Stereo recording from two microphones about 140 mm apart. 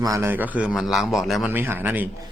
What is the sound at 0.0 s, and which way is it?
A man's voice, 20° right (ahead or behind).